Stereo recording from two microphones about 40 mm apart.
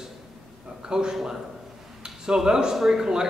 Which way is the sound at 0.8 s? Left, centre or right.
Centre.